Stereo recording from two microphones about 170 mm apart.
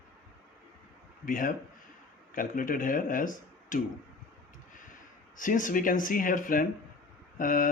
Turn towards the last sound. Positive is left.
turn(degrees=55)  # may be behind; listen again after turning